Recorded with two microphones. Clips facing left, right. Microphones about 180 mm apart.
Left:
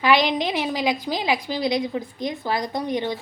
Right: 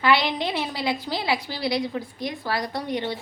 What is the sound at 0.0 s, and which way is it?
A woman's voice, 15° left (ahead or behind).